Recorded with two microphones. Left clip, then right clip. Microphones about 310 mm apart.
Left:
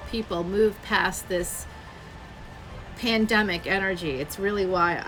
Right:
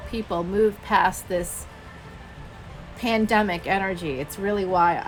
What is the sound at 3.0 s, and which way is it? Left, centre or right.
A woman's voice, centre.